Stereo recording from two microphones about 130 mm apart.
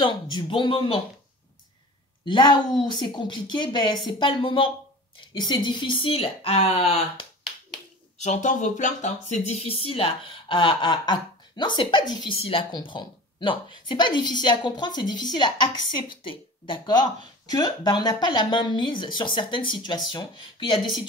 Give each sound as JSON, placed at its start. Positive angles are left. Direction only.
{"t": 0.0, "sound": "speech", "side_deg": 40}
{"t": 2.2, "sound": "speech", "side_deg": 35}
{"t": 8.2, "sound": "speech", "side_deg": 65}